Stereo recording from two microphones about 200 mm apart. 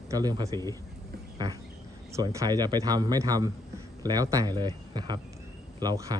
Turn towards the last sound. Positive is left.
turn(degrees=-15)  # may be behind; listen again after turning